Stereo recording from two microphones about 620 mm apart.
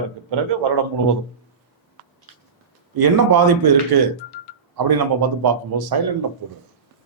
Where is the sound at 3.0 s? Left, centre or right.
Right.